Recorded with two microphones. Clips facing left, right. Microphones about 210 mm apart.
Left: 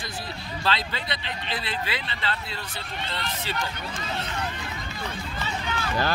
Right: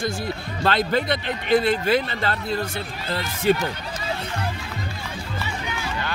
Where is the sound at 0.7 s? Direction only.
50° right (ahead or behind).